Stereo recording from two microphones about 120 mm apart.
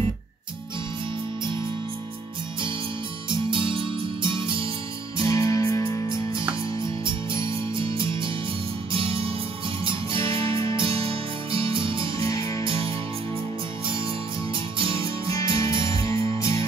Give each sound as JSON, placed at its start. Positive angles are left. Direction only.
{"t": 3.3, "sound": "music", "side_deg": -45}
{"t": 5.2, "sound": "music", "side_deg": 30}
{"t": 7.1, "sound": "music", "side_deg": -45}
{"t": 10.2, "sound": "music", "side_deg": 25}
{"t": 10.8, "sound": "music", "side_deg": -50}
{"t": 12.2, "sound": "music", "side_deg": 30}
{"t": 12.6, "sound": "music", "side_deg": -50}
{"t": 15.2, "sound": "music", "side_deg": 25}